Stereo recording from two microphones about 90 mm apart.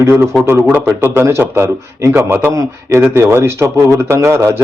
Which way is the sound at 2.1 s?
20° right (ahead or behind).